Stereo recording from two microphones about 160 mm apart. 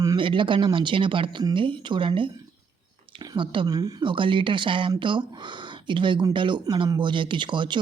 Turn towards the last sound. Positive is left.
turn(degrees=-30)  # may be behind; listen again after turning